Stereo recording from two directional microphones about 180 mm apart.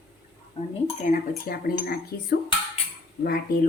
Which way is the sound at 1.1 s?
55° left (ahead or behind).